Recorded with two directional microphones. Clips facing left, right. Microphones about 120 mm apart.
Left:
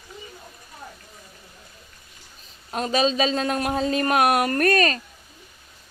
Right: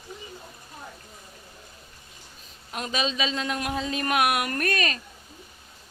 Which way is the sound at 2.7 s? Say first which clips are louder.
Left 7 dB; 35° left (ahead or behind).